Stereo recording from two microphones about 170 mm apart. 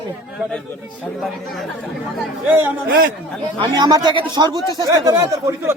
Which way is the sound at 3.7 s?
20° right (ahead or behind).